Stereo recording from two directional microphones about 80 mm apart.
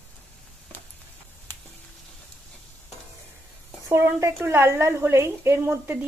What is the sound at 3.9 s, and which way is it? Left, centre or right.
A woman's voice, right.